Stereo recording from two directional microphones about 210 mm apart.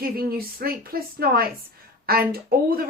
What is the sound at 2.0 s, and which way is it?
Speech, 45° right (ahead or behind).